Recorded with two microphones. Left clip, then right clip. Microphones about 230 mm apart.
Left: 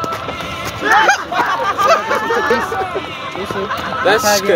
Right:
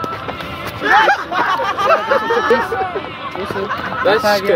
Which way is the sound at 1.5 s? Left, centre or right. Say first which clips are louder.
Left 3 dB; right.